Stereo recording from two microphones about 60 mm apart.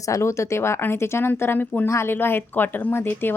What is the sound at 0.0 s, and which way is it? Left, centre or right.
A woman's voice, left.